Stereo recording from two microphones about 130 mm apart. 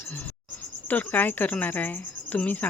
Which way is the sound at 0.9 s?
15° left (ahead or behind).